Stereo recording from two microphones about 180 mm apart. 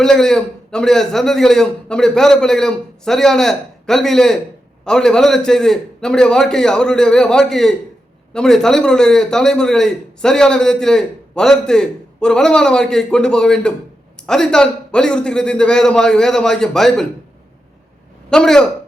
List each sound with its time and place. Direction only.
0.0 s a man's voice: 5° left (ahead or behind)
18.3 s a man's voice: 5° left (ahead or behind)